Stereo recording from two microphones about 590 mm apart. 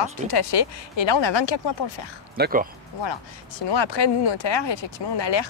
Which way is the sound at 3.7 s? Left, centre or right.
Left.